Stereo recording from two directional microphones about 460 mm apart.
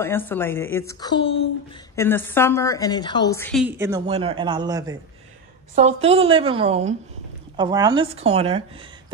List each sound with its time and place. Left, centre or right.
0.0 s a woman's voice: centre